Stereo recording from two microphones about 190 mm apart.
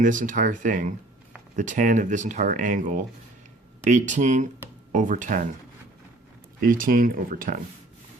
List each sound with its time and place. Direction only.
0.0 s speech: 45° right (ahead or behind)
6.6 s speech: 45° right (ahead or behind)